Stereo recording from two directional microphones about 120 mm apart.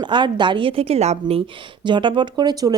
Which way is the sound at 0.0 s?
40° right (ahead or behind).